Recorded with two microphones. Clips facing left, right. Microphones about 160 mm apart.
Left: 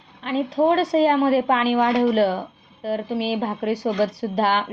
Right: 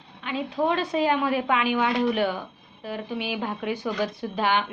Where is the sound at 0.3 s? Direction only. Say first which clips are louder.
Left 6 dB; 40° left (ahead or behind).